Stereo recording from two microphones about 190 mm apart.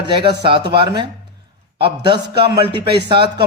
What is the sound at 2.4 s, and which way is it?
Speech, 25° right (ahead or behind).